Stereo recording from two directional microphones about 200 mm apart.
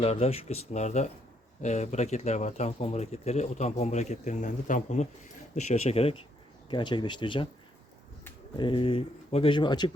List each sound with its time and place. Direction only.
0.0 s speech: 30° left (ahead or behind)
8.5 s speech: 25° left (ahead or behind)